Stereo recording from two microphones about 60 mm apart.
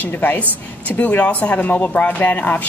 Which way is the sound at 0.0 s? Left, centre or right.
Left.